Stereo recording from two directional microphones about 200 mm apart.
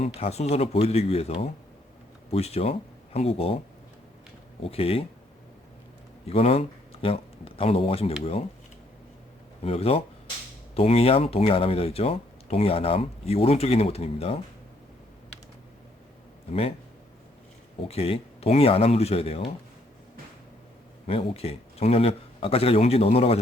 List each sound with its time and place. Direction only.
0.0 s speech: 30° left (ahead or behind)
4.6 s speech: 30° left (ahead or behind)
6.2 s speech: 30° left (ahead or behind)
9.6 s speech: 30° left (ahead or behind)
16.5 s speech: 30° left (ahead or behind)
17.8 s speech: 30° left (ahead or behind)
21.1 s speech: 30° left (ahead or behind)